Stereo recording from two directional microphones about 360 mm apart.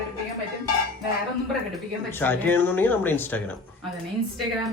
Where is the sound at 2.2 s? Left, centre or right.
Centre.